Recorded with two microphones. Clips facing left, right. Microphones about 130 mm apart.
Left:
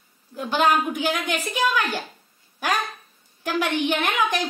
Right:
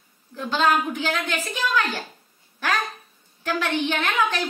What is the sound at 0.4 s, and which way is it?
A woman's voice, 15° left (ahead or behind).